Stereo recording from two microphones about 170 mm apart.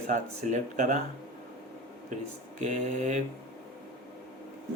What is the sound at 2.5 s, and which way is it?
Speech, 45° right (ahead or behind).